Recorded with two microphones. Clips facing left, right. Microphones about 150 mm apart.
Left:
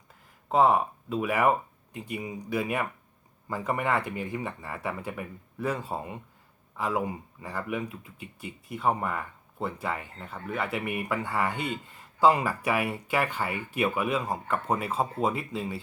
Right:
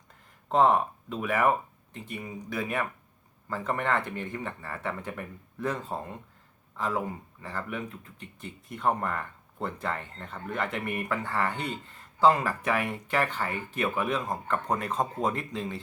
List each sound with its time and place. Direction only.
0.4 s speech: 5° left (ahead or behind)